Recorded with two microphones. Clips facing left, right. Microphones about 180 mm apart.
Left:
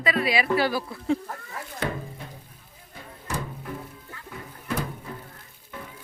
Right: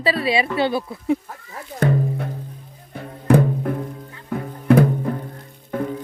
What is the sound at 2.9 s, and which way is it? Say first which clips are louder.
Music: right 17 dB; 60° right (ahead or behind).